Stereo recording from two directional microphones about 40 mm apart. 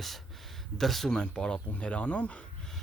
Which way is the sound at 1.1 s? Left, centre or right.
Centre.